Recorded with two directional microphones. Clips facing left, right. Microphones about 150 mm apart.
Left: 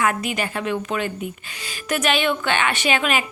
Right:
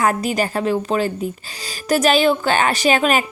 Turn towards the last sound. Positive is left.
turn(degrees=-40)  # may be behind; listen again after turning